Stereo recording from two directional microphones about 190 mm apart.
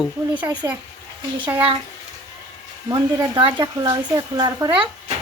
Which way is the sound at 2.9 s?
20° right (ahead or behind).